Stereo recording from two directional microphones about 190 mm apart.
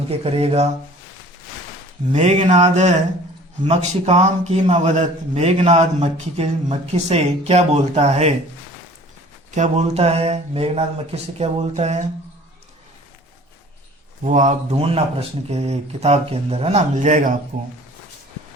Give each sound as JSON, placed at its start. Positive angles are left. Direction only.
{"t": 0.1, "sound": "a man's voice", "side_deg": -30}
{"t": 2.1, "sound": "a man's voice", "side_deg": -35}
{"t": 9.5, "sound": "a man's voice", "side_deg": -35}
{"t": 14.3, "sound": "a man's voice", "side_deg": -40}